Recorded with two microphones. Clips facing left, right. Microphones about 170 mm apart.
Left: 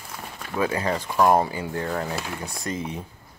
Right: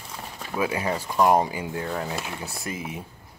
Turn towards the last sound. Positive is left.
turn(degrees=-5)  # may be behind; listen again after turning